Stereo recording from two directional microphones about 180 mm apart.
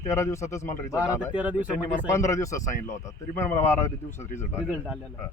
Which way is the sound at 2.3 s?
15° left (ahead or behind).